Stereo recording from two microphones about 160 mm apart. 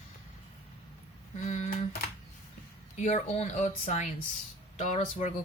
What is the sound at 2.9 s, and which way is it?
Speech, 45° left (ahead or behind).